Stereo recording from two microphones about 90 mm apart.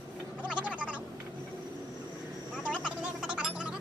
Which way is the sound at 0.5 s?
15° right (ahead or behind).